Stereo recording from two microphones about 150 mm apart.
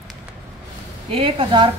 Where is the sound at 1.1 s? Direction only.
35° right (ahead or behind).